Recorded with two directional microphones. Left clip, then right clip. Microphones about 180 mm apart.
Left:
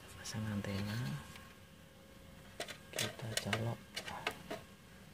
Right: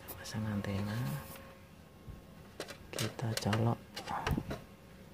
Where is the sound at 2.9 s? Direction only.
20° right (ahead or behind).